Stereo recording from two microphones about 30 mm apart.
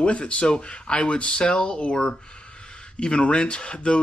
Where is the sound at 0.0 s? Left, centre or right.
Left.